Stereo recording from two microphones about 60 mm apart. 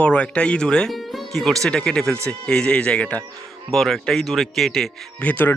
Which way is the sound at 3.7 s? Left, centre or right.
Centre.